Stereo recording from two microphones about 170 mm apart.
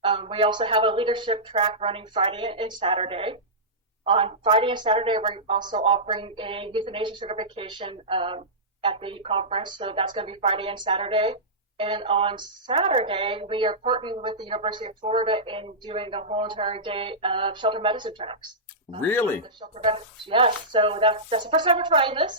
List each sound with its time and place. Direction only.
0.0 s a woman's voice: 30° right (ahead or behind)
19.0 s speech: 10° left (ahead or behind)
19.4 s a woman's voice: 30° right (ahead or behind)